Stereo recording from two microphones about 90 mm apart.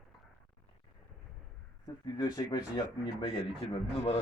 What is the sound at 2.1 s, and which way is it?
Speech, 45° left (ahead or behind).